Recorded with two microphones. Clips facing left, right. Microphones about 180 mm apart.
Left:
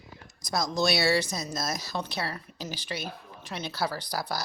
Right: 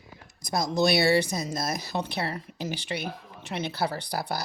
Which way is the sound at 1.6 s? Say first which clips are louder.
Even; 55° right (ahead or behind).